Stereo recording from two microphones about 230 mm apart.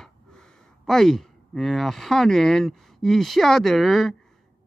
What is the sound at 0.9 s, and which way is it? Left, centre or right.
Speech, centre.